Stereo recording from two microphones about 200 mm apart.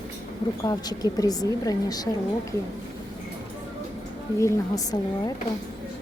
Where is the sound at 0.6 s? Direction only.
20° left (ahead or behind).